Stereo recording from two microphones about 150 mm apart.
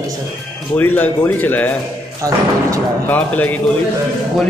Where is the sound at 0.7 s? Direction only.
10° left (ahead or behind).